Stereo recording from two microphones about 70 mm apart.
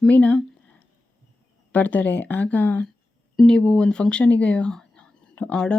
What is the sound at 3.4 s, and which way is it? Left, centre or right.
Speech, centre.